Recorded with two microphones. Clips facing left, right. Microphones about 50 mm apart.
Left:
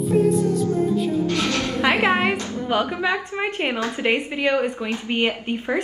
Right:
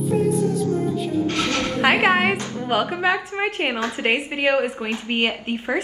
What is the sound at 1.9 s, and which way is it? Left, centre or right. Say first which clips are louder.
Music: right 1 dB; centre.